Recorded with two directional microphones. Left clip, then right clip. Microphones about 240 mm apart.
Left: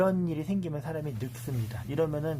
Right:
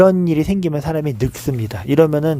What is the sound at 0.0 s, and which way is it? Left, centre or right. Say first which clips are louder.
Speech: right 15 dB; right.